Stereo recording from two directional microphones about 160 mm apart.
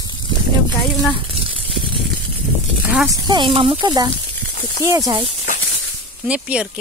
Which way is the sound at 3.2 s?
30° right (ahead or behind).